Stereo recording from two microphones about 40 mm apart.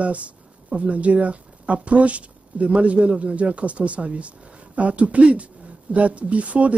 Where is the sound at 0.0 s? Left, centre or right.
Right.